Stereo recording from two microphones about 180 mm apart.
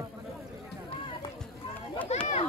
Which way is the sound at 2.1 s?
35° left (ahead or behind).